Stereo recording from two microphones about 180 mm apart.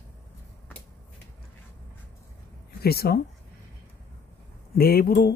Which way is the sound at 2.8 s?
60° left (ahead or behind).